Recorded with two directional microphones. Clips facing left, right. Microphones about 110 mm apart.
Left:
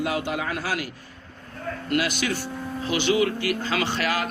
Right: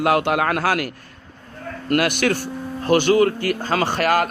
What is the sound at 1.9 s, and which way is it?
Speech, 60° right (ahead or behind).